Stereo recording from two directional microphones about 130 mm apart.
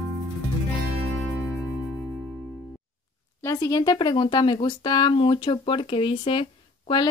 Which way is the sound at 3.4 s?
25° left (ahead or behind).